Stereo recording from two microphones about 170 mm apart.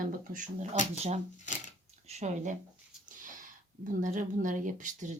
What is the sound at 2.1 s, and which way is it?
A woman's voice, 45° right (ahead or behind).